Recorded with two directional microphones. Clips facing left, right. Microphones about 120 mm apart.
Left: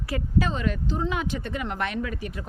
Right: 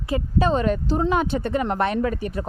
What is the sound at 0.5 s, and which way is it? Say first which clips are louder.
Speech: right 7 dB; 40° right (ahead or behind).